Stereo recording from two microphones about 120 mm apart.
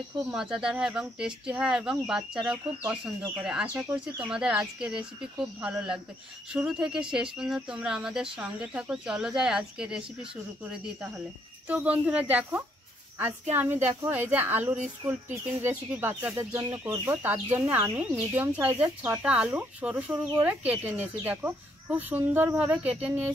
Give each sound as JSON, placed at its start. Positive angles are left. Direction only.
{"t": 0.3, "sound": "speech", "side_deg": -5}
{"t": 16.5, "sound": "speech", "side_deg": -30}
{"t": 16.9, "sound": "speech", "side_deg": -20}